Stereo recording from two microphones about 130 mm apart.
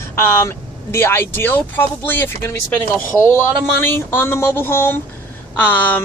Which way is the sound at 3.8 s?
15° left (ahead or behind).